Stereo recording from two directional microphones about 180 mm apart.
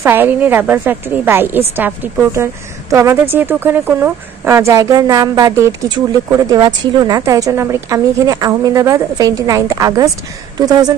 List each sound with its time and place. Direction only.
0.0 s a woman's voice: 10° right (ahead or behind)